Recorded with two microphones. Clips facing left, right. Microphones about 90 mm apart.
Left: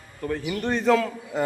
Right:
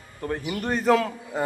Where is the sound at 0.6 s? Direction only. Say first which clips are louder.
Left 1 dB; 5° right (ahead or behind).